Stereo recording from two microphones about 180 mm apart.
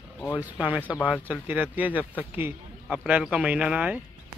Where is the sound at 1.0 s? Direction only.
5° right (ahead or behind).